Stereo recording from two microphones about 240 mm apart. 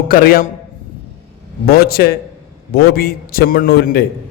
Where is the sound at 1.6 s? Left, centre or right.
Left.